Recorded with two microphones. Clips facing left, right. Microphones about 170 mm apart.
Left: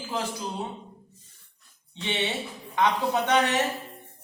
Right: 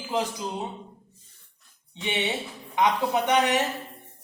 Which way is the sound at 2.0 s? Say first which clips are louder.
Right 1 dB; 15° right (ahead or behind).